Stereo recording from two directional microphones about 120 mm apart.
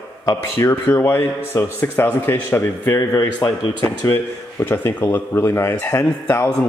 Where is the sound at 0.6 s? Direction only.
20° left (ahead or behind).